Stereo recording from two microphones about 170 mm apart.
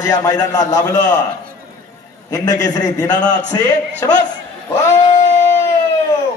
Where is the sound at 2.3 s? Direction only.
20° left (ahead or behind).